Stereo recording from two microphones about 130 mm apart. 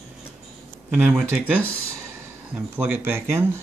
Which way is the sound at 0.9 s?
10° right (ahead or behind).